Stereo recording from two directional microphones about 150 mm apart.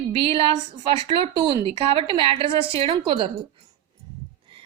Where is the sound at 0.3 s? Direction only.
35° right (ahead or behind).